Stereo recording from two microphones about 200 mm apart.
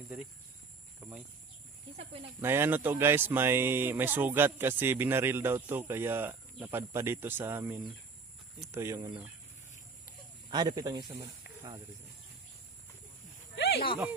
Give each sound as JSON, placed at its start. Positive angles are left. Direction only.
{"t": 2.4, "sound": "speech", "side_deg": -10}
{"t": 10.5, "sound": "speech", "side_deg": -20}
{"t": 13.6, "sound": "snake", "side_deg": 55}